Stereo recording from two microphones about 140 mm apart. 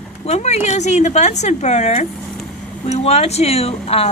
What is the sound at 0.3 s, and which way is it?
A woman's voice, 55° left (ahead or behind).